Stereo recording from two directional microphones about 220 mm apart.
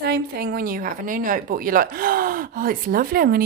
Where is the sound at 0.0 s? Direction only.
45° right (ahead or behind).